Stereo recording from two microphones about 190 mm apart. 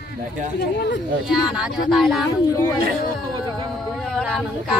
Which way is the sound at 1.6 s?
Centre (ahead or behind).